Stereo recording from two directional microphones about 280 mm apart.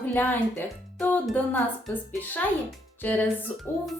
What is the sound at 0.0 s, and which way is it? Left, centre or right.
A child's voice, centre.